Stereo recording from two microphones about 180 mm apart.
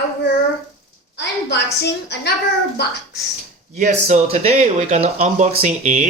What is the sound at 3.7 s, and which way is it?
Speech, 40° right (ahead or behind).